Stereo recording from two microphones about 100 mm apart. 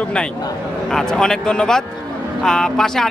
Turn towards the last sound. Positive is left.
turn(degrees=5)  # may be behind; listen again after turning